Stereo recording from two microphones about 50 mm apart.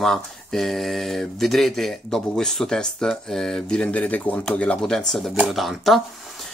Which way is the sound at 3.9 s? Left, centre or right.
Left.